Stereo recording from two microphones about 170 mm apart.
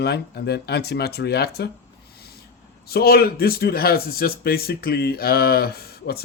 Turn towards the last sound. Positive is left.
turn(degrees=65)  # may be behind; listen again after turning